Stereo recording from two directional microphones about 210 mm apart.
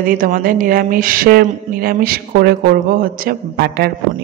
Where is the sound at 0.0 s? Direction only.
40° right (ahead or behind).